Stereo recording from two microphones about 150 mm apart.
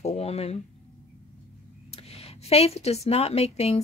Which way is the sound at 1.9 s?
40° left (ahead or behind).